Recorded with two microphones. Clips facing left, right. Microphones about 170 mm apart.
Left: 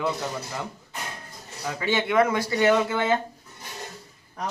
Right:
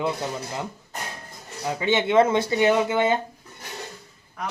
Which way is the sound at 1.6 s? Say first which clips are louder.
Right 3 dB; 20° right (ahead or behind).